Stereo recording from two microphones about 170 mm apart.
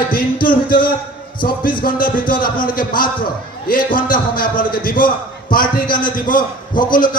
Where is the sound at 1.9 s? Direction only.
55° left (ahead or behind).